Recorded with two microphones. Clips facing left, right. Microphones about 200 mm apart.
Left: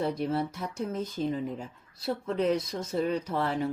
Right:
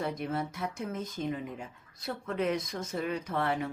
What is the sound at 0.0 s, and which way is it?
Speech, 30° left (ahead or behind).